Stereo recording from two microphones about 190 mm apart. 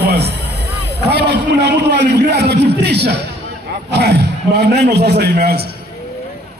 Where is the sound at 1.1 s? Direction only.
60° right (ahead or behind).